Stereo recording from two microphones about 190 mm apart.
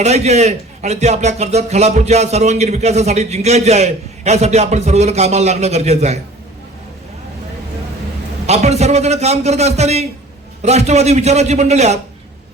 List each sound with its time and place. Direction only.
0.0 s a man's voice: 35° right (ahead or behind)
8.4 s a man's voice: 35° right (ahead or behind)